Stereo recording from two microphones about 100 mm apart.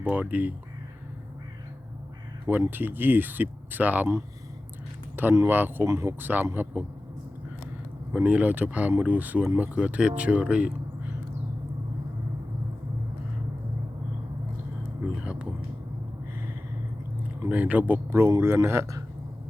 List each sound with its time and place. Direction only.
0.0 s speech: 15° right (ahead or behind)
2.5 s speech: 20° right (ahead or behind)
5.1 s speech: 25° right (ahead or behind)
8.1 s speech: 15° right (ahead or behind)
15.0 s speech: 10° right (ahead or behind)
17.4 s speech: 15° right (ahead or behind)